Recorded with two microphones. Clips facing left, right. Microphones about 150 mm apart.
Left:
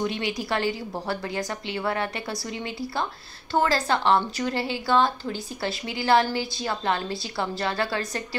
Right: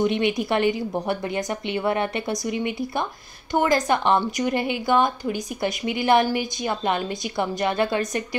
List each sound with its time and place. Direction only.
0.0 s a woman's voice: 20° right (ahead or behind)